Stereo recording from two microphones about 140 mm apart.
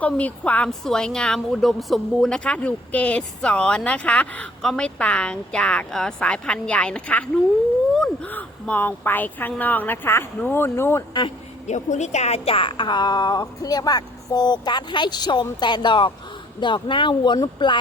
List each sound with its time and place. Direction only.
0.0 s a woman's voice: 10° left (ahead or behind)
11.6 s a woman's voice: 55° left (ahead or behind); by 17.7 s 35° left (ahead or behind)